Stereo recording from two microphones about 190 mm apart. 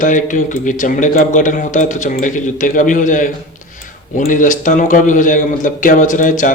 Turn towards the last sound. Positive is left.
turn(degrees=45)  # may be behind; listen again after turning